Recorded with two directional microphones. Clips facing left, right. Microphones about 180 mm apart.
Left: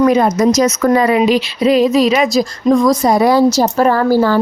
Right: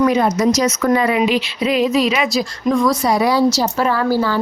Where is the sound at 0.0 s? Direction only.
45° left (ahead or behind).